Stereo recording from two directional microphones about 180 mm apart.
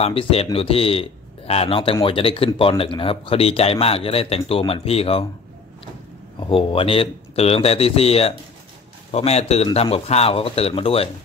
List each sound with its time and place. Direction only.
0.0 s speech: 30° left (ahead or behind)
6.5 s speech: 30° left (ahead or behind)